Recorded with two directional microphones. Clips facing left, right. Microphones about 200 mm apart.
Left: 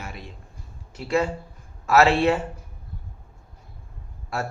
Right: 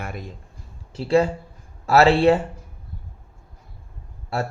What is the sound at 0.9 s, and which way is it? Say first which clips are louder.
A man's voice: right 5 dB; 30° right (ahead or behind).